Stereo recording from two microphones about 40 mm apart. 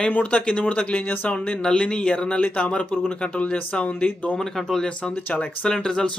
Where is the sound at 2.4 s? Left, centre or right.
Left.